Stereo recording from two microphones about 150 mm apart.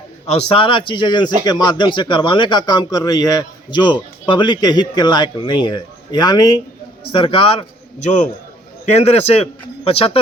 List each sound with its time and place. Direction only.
0.5 s a man's voice: 35° left (ahead or behind)
8.9 s speech: 45° left (ahead or behind)